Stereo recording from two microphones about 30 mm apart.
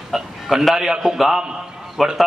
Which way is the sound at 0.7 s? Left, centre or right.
Right.